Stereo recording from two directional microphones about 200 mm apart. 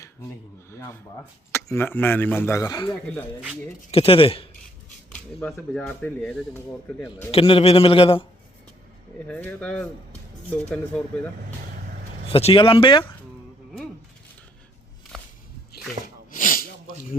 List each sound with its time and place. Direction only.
0.0 s speech: 15° left (ahead or behind)
3.9 s a man's voice: 25° left (ahead or behind)
5.1 s speech: 5° left (ahead or behind)
7.3 s a man's voice: 30° left (ahead or behind)
9.2 s speech: 5° left (ahead or behind)
12.3 s a man's voice: 30° left (ahead or behind)
15.1 s walk: centre (ahead or behind)
16.0 s snort: 35° right (ahead or behind)
16.3 s snort: 40° left (ahead or behind)